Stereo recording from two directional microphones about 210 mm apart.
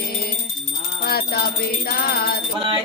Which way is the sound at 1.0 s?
50° left (ahead or behind).